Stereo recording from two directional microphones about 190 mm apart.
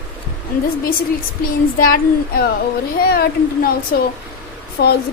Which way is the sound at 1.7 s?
50° left (ahead or behind).